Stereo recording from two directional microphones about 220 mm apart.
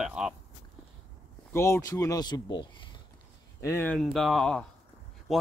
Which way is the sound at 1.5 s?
10° left (ahead or behind).